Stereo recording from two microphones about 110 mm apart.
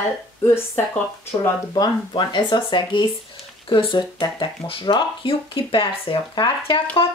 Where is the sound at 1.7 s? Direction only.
45° left (ahead or behind).